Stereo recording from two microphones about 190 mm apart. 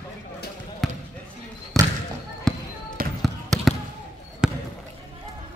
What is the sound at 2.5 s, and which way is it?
Basketball bounce, 5° left (ahead or behind).